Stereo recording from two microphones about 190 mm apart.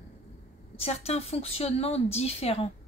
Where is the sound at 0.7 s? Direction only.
35° left (ahead or behind).